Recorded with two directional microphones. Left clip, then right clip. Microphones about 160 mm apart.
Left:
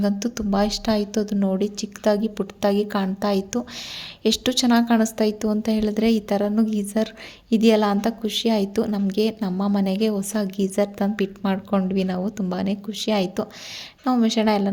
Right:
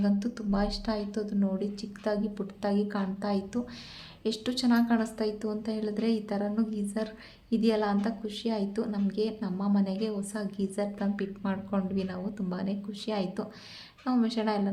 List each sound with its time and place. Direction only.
0.0 s a woman's voice: 55° left (ahead or behind)